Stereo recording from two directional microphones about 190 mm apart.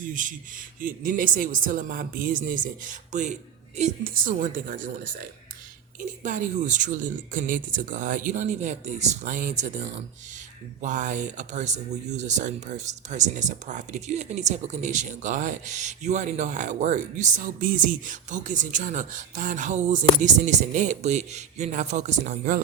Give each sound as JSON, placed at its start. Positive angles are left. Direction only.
{"t": 0.1, "sound": "speech", "side_deg": -45}
{"t": 6.0, "sound": "speech", "side_deg": -40}